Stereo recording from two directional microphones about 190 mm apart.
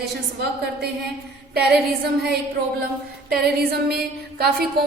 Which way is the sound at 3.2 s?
55° right (ahead or behind).